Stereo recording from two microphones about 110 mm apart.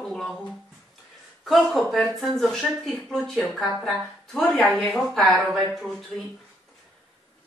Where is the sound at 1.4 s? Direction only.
Centre (ahead or behind).